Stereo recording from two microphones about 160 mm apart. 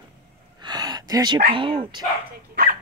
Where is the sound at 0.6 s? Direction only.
25° right (ahead or behind).